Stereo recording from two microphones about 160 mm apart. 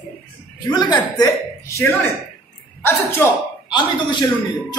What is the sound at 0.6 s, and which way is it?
A woman's voice, 25° left (ahead or behind).